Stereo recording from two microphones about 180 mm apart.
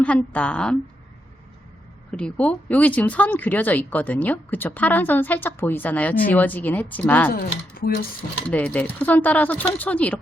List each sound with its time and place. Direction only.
0.0 s speech: 5° left (ahead or behind)
2.0 s speech: 5° left (ahead or behind)
7.3 s speech: 55° left (ahead or behind)
8.4 s speech: 5° left (ahead or behind)